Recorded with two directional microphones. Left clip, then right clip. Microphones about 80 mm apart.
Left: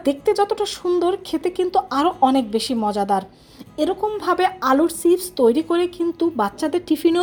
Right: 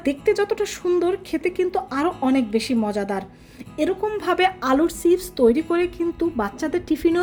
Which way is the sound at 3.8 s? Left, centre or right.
Centre.